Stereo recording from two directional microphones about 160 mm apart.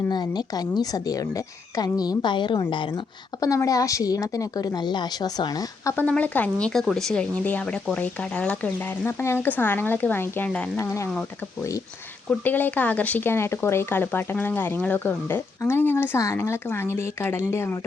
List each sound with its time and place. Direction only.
0.1 s a woman's voice: 25° left (ahead or behind)
6.1 s a woman's voice: 10° left (ahead or behind)
12.3 s speech: 10° left (ahead or behind)